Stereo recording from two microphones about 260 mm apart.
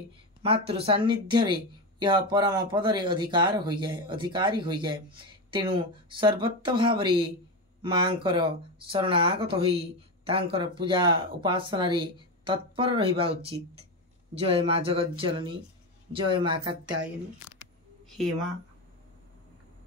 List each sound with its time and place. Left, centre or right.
0.4 s speech: right